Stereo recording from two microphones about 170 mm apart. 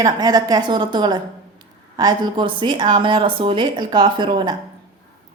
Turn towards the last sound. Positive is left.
turn(degrees=-25)  # may be behind; listen again after turning